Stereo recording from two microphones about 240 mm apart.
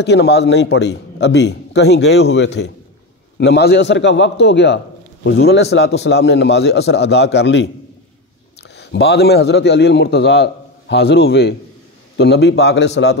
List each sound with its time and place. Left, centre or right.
0.0 s a man's voice: left
8.7 s a man's voice: left